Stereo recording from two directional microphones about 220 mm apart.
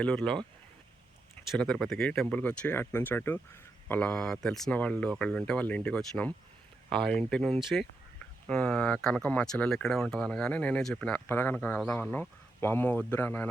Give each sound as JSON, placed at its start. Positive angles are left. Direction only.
{"t": 0.0, "sound": "speech", "side_deg": 5}
{"t": 1.5, "sound": "speech", "side_deg": 5}